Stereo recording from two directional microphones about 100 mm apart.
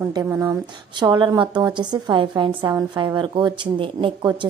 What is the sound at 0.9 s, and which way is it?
Speech, 50° right (ahead or behind).